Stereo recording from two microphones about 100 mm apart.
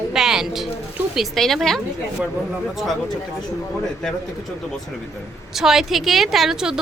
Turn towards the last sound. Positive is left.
turn(degrees=-5)  # may be behind; listen again after turning